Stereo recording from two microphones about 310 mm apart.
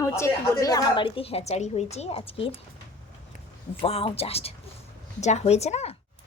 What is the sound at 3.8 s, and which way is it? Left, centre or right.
Speech, centre.